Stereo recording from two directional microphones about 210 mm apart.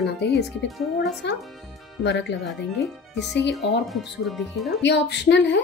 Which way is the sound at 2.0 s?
55° left (ahead or behind).